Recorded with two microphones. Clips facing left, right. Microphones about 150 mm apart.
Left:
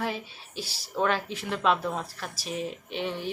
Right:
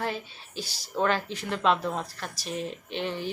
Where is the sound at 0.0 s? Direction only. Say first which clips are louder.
Even; centre (ahead or behind).